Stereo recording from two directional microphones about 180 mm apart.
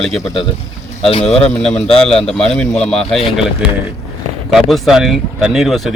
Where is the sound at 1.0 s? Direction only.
30° left (ahead or behind).